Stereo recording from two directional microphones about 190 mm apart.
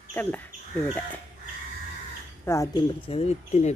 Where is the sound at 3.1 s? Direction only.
35° left (ahead or behind).